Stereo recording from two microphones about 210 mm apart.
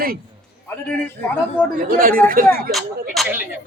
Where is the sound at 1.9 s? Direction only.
45° right (ahead or behind).